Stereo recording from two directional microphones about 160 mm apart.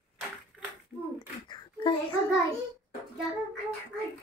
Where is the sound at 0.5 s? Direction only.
Centre (ahead or behind).